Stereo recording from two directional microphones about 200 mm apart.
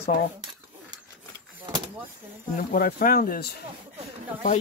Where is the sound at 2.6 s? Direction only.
45° left (ahead or behind).